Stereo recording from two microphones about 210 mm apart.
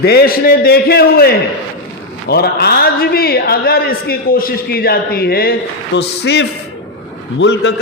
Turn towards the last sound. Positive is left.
turn(degrees=60)  # may be behind; listen again after turning